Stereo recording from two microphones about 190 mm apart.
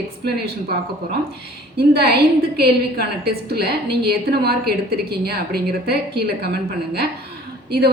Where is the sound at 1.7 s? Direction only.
55° right (ahead or behind).